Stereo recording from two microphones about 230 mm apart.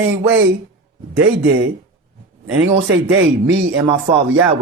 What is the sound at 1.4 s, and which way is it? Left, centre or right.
Speech, right.